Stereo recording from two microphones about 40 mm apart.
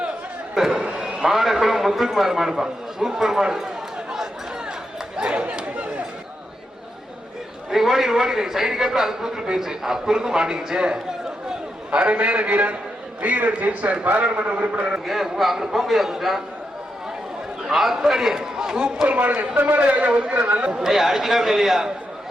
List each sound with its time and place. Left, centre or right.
0.5 s a sound: centre
1.6 s a man's voice: centre
5.1 s speech: right
7.7 s a man's voice: centre; by 15.0 s right
15.0 s a man's voice: centre
17.7 s a man's voice: centre
19.0 s a man's voice: right
19.8 s a man's voice: right
20.3 s a man's voice: right
20.8 s a man's voice: centre